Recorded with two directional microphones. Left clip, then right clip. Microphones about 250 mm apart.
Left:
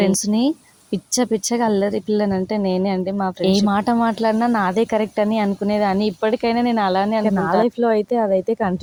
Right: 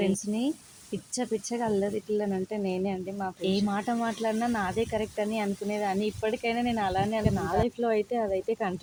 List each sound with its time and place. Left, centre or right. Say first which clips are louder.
0.0 s speech: left 10 dB; left